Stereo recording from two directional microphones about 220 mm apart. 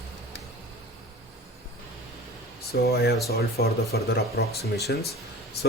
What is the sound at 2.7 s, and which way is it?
Speech, 45° left (ahead or behind).